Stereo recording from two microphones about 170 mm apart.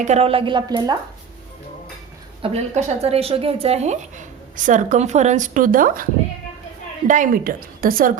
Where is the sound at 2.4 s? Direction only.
35° right (ahead or behind).